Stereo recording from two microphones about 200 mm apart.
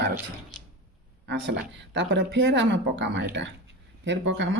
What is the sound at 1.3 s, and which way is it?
Speech, 60° right (ahead or behind).